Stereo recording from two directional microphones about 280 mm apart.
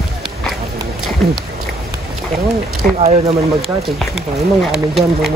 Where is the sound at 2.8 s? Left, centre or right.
Right.